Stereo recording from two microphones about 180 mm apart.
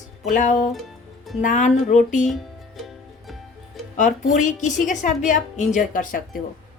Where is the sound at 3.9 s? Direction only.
45° left (ahead or behind).